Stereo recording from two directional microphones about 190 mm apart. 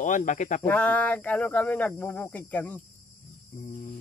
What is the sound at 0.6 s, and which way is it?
Speech, 10° left (ahead or behind).